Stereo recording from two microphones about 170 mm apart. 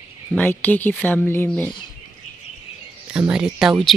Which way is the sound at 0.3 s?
10° left (ahead or behind).